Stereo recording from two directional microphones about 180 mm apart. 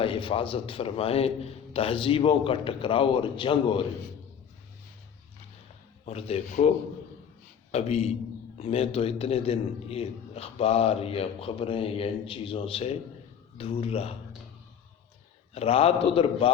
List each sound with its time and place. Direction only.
0.0 s a man's voice: 30° left (ahead or behind)
6.1 s a man's voice: 35° left (ahead or behind)
7.7 s a man's voice: 35° left (ahead or behind)
15.5 s a man's voice: 35° left (ahead or behind)